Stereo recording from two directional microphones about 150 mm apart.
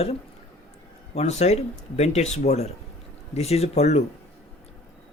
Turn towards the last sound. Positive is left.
turn(degrees=45)  # may be behind; listen again after turning